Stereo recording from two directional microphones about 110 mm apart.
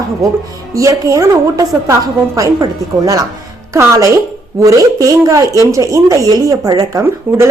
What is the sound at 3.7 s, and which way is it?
A woman's voice, 25° right (ahead or behind).